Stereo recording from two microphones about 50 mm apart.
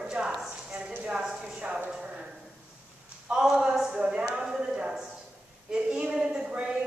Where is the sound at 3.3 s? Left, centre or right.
Right.